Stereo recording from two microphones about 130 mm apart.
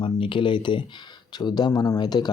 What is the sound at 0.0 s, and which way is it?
Speech, 40° left (ahead or behind).